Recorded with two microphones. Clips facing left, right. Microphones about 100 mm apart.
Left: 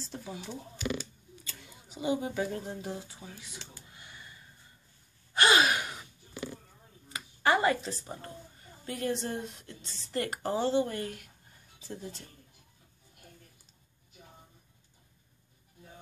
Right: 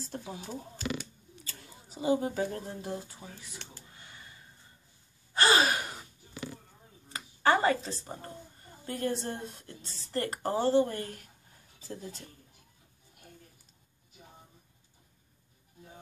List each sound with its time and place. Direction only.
0.0 s speech: 55° right (ahead or behind)
0.3 s a woman's voice: 40° right (ahead or behind)
1.4 s a sound: 40° right (ahead or behind)
2.1 s speech: 45° right (ahead or behind)
3.6 s speech: 65° right (ahead or behind)
3.9 s a sound: 35° right (ahead or behind)
5.3 s gasp: 35° right (ahead or behind)
7.1 s a sound: 35° right (ahead or behind)
8.8 s a woman's voice: 40° right (ahead or behind)